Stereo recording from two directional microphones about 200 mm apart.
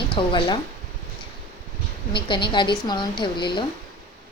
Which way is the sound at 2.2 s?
25° left (ahead or behind).